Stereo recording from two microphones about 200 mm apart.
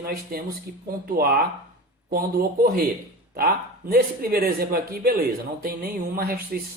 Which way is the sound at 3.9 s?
50° right (ahead or behind).